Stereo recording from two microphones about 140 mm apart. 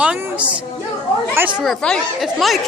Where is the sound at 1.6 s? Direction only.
Centre (ahead or behind).